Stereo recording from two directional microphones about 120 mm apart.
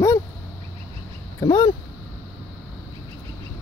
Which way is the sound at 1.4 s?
30° left (ahead or behind).